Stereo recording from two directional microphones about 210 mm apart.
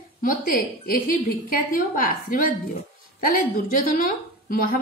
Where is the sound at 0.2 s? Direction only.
45° left (ahead or behind).